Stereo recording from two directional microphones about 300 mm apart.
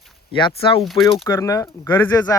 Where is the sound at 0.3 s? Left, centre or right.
Centre.